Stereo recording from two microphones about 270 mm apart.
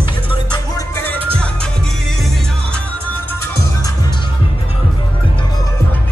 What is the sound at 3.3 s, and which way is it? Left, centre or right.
Music, centre.